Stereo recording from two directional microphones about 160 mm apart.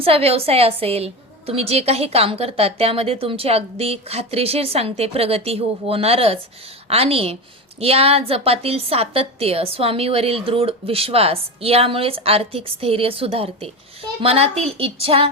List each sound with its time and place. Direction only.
0.0 s a woman's voice: 35° right (ahead or behind)